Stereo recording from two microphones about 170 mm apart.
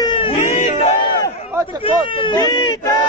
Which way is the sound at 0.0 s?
30° left (ahead or behind).